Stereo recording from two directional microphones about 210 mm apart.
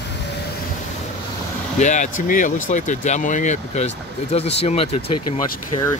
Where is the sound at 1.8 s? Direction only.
35° left (ahead or behind).